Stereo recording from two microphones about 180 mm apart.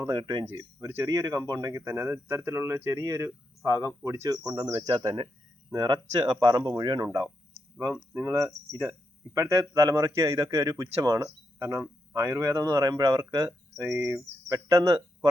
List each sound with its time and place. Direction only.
0.0 s speech: 20° right (ahead or behind)